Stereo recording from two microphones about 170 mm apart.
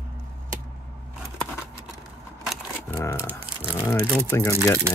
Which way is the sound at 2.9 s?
15° left (ahead or behind).